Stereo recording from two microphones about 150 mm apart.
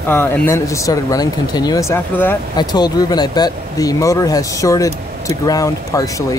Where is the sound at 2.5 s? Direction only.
30° left (ahead or behind).